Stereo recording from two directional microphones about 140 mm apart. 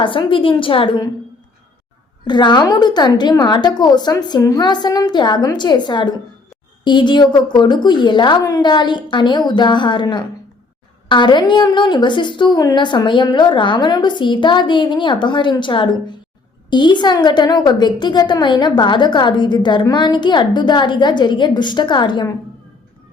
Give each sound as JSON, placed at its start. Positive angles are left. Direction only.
{"t": 0.0, "sound": "a woman's voice", "side_deg": 35}
{"t": 2.2, "sound": "a woman's voice", "side_deg": 30}